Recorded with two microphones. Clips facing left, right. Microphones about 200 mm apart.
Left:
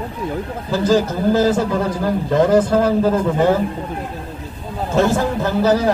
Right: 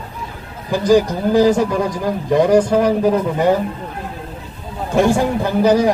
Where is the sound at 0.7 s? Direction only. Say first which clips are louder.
Right 3 dB; 15° right (ahead or behind).